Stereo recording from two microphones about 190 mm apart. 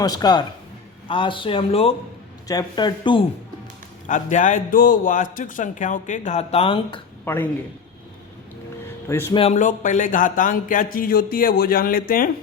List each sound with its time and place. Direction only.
0.0 s speech: 20° left (ahead or behind)
2.5 s speech: 20° left (ahead or behind)
4.0 s a man's voice: 40° left (ahead or behind)
7.3 s speech: 10° left (ahead or behind)
9.0 s speech: 15° left (ahead or behind)
9.3 s speech: 30° left (ahead or behind)
9.6 s a sound: 40° left (ahead or behind)